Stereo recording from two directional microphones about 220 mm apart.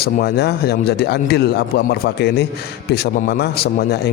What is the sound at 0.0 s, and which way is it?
Speech, 45° left (ahead or behind).